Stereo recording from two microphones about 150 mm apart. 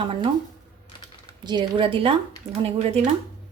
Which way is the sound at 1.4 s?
30° right (ahead or behind).